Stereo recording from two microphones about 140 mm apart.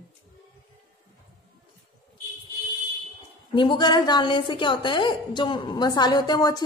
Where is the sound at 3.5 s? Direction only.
35° left (ahead or behind).